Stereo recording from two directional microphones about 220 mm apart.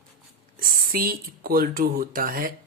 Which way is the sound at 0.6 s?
40° right (ahead or behind).